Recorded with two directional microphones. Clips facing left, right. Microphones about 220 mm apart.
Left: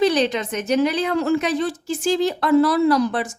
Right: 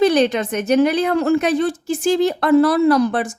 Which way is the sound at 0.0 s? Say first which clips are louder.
Right 4 dB; 55° right (ahead or behind).